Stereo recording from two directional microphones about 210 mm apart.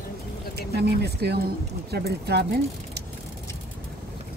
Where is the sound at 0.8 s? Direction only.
50° right (ahead or behind).